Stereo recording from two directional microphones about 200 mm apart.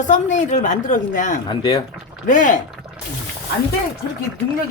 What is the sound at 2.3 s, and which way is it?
Speech, 40° left (ahead or behind).